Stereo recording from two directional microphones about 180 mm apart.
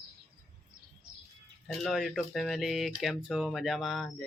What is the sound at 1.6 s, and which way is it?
Speech, centre (ahead or behind).